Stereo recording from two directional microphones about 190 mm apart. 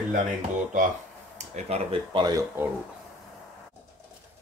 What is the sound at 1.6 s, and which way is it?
Speech, 20° right (ahead or behind).